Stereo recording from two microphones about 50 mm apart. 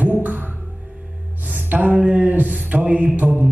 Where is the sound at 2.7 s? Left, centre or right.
Right.